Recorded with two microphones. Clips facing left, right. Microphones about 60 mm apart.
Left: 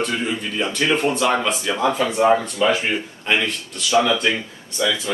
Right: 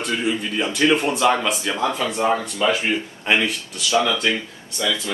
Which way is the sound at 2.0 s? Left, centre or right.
Centre.